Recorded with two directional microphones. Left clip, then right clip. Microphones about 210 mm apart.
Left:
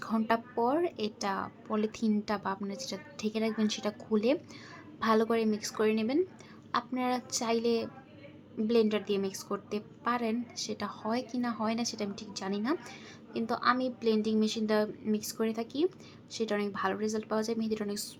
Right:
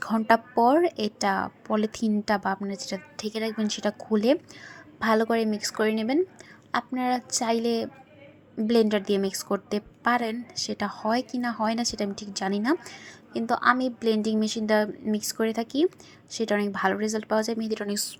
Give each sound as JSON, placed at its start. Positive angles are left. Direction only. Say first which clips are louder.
{"t": 0.0, "sound": "a woman's voice", "louder": "right 8 dB", "side_deg": -25}